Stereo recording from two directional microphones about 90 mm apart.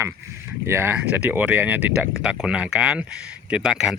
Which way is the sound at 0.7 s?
25° right (ahead or behind).